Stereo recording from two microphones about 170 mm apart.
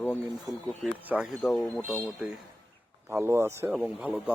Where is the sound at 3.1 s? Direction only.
15° right (ahead or behind).